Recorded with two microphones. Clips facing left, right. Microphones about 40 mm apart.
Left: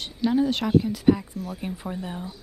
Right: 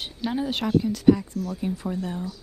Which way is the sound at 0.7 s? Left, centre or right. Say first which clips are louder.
Right 4 dB; centre.